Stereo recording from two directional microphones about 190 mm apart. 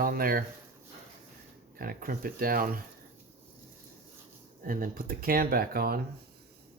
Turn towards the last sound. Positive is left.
turn(degrees=-50)  # may be behind; listen again after turning